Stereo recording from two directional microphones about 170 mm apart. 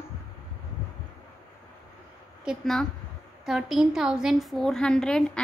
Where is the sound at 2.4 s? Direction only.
Centre (ahead or behind).